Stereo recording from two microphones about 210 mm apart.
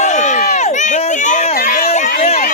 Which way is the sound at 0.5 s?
35° left (ahead or behind).